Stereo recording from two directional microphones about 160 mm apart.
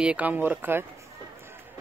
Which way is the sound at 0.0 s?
10° right (ahead or behind).